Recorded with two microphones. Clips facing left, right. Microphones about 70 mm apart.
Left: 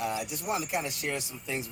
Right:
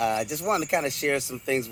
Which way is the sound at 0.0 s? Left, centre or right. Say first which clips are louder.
Right 7 dB; right.